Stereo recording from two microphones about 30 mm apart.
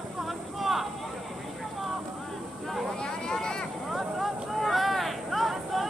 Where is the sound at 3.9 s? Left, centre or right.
Centre.